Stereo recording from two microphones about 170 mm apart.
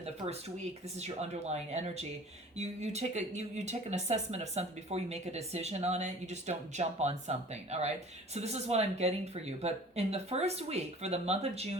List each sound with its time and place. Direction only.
0.9 s speech: 40° right (ahead or behind)